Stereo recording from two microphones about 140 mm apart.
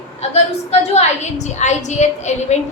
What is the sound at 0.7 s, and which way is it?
A woman's voice, 50° left (ahead or behind).